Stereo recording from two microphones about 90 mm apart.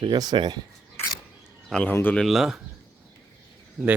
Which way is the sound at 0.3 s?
55° right (ahead or behind).